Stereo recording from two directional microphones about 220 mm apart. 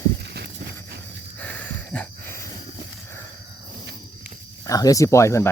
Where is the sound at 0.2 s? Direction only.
50° right (ahead or behind).